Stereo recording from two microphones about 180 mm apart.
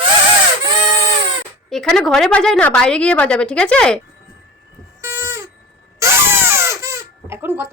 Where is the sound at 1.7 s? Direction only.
Centre (ahead or behind).